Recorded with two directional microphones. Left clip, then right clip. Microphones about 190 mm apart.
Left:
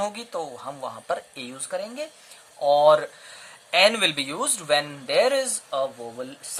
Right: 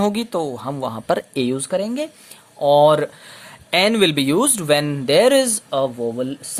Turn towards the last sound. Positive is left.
turn(degrees=-45)  # may be behind; listen again after turning